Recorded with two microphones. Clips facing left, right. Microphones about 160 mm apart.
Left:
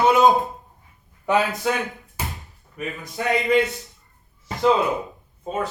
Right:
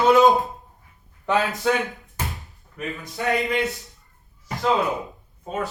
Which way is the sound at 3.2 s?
20° left (ahead or behind).